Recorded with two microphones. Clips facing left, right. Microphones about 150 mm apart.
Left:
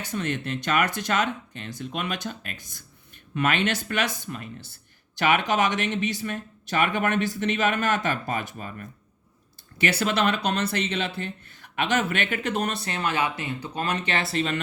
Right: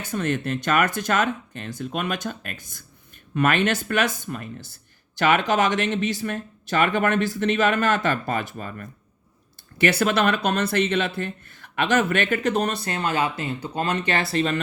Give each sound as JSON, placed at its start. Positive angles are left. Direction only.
{"t": 0.0, "sound": "speech", "side_deg": -50}